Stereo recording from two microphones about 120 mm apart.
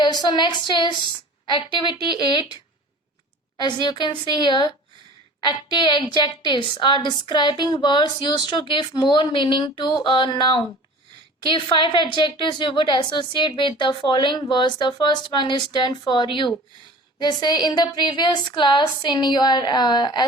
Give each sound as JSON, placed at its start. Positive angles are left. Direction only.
{"t": 0.0, "sound": "a woman's voice", "side_deg": 35}
{"t": 3.6, "sound": "a woman's voice", "side_deg": 40}